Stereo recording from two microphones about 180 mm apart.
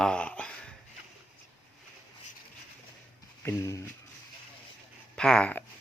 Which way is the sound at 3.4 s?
15° left (ahead or behind).